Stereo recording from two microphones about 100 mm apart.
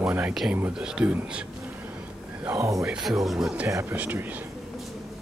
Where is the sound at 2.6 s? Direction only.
30° right (ahead or behind).